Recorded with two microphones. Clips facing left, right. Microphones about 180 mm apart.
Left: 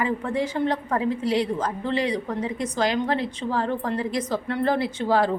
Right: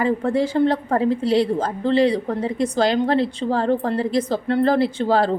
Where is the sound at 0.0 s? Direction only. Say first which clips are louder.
Right 5 dB; 35° right (ahead or behind).